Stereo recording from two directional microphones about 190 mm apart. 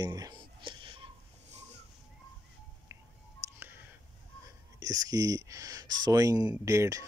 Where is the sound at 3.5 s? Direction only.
10° right (ahead or behind).